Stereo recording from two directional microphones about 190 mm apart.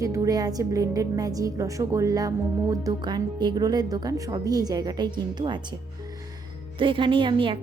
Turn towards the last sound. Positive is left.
turn(degrees=-25)  # may be behind; listen again after turning